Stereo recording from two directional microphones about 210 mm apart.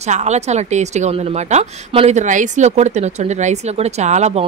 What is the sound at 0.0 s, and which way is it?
A woman's voice, 35° right (ahead or behind).